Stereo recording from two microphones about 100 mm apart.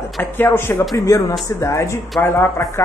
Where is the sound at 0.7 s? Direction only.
35° left (ahead or behind).